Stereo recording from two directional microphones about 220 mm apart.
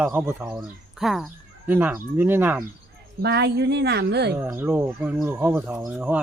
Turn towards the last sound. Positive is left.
turn(degrees=-5)  # may be behind; listen again after turning